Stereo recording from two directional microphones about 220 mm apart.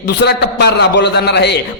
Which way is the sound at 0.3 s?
50° left (ahead or behind).